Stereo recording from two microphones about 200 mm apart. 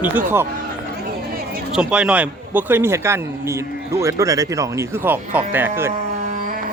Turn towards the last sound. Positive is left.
turn(degrees=-10)  # may be behind; listen again after turning